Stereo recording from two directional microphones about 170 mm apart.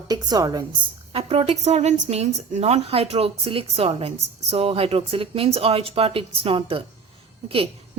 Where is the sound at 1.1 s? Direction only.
35° right (ahead or behind).